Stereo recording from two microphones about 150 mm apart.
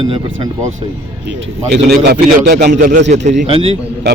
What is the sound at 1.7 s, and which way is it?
Speech, 90° right.